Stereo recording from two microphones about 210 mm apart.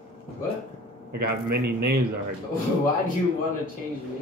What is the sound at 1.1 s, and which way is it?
Speech, 50° right (ahead or behind).